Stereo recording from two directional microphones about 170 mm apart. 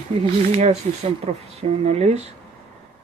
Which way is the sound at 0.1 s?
40° right (ahead or behind).